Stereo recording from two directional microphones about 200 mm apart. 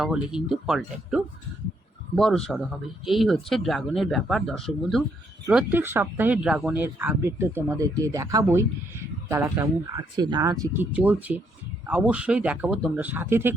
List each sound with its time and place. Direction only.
0.0 s speech: 5° right (ahead or behind)